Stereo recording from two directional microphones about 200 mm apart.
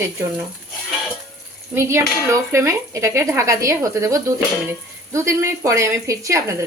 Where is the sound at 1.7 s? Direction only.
15° right (ahead or behind).